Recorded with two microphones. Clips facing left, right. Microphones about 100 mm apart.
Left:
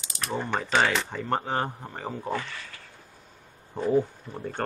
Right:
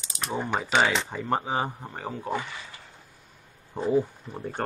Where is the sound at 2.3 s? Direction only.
15° right (ahead or behind).